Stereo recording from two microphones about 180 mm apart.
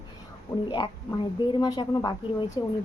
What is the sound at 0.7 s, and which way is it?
A woman's voice, 25° left (ahead or behind).